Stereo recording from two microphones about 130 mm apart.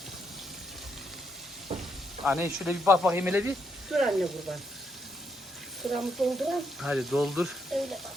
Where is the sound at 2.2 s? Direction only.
10° right (ahead or behind).